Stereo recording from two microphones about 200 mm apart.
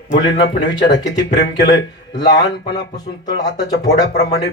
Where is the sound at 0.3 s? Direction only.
60° left (ahead or behind).